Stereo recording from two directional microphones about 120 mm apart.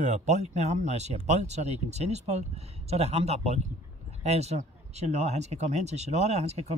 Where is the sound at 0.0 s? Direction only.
75° right (ahead or behind).